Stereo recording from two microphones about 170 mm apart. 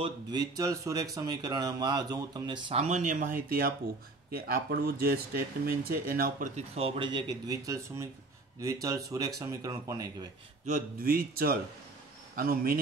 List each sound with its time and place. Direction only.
0.0 s speech: 25° right (ahead or behind)
2.8 s speech: 45° right (ahead or behind)
6.5 s speech: 35° right (ahead or behind); by 10.0 s 20° right (ahead or behind)
10.6 s speech: 55° right (ahead or behind)